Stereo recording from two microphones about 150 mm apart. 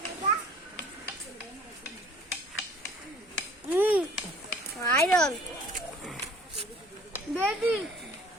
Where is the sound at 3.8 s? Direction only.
10° right (ahead or behind).